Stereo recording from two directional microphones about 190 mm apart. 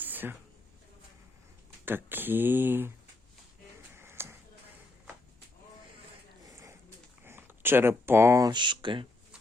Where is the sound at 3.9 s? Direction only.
10° right (ahead or behind).